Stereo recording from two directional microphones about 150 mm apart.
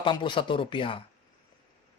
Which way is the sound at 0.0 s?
30° left (ahead or behind).